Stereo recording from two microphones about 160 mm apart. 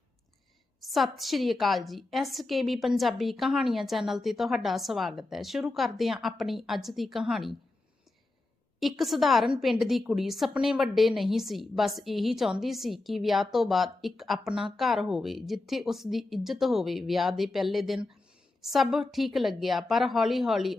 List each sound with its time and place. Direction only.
0.8 s a woman's voice: centre (ahead or behind)
8.8 s a woman's voice: centre (ahead or behind)